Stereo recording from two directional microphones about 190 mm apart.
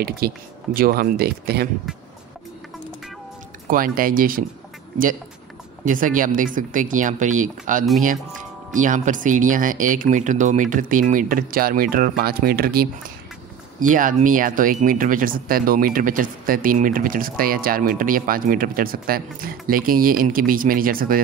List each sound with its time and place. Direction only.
0.2 s speech: 55° right (ahead or behind)
3.6 s speech: 45° right (ahead or behind)
5.9 s speech: 45° right (ahead or behind)
8.8 s speech: 40° right (ahead or behind)